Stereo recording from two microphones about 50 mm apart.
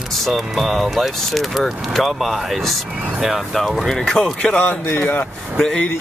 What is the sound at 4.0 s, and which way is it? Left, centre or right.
Speech, centre.